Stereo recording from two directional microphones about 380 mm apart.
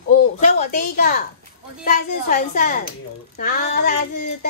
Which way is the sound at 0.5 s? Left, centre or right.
Left.